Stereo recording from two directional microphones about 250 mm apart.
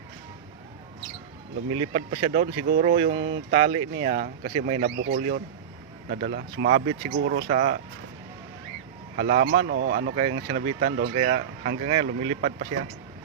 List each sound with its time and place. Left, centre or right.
1.8 s speech: right
3.5 s speech: right
5.0 s speech: right
9.1 s speech: right
11.7 s speech: right
12.4 s speech: right